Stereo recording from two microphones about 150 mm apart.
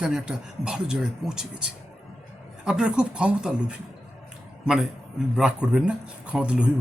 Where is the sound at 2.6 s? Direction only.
5° right (ahead or behind).